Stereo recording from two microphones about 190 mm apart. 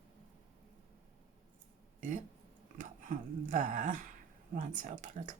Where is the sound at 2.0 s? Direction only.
40° right (ahead or behind).